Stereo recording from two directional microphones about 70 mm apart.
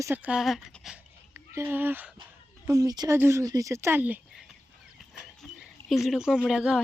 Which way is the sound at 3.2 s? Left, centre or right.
Right.